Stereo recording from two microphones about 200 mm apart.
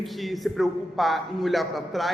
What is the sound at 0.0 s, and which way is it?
A man's voice, centre (ahead or behind).